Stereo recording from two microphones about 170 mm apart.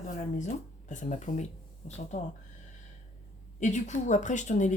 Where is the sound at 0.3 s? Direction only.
45° left (ahead or behind).